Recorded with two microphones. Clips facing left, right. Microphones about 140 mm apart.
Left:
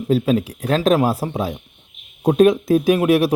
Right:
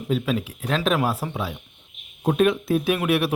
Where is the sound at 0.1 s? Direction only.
40° left (ahead or behind).